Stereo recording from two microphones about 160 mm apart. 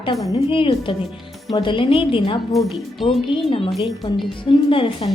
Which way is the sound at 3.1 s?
35° left (ahead or behind).